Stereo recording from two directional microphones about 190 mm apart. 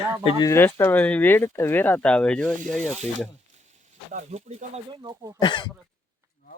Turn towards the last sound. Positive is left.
turn(degrees=25)  # may be behind; listen again after turning